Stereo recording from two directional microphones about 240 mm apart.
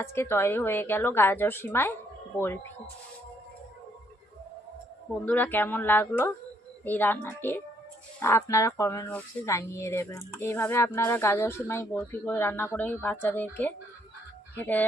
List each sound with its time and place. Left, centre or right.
0.0 s speech: centre
5.2 s speech: centre